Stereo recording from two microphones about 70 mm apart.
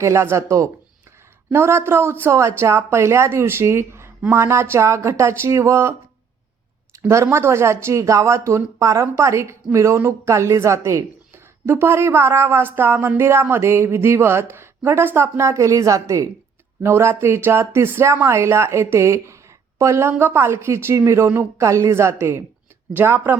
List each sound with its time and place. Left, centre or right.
0.0 s speech: right
7.1 s speech: right
16.8 s speech: right
23.0 s speech: right